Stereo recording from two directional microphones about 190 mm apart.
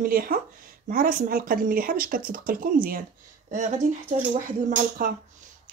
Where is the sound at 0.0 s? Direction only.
50° right (ahead or behind).